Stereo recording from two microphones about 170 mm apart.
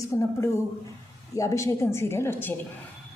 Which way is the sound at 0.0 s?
15° left (ahead or behind).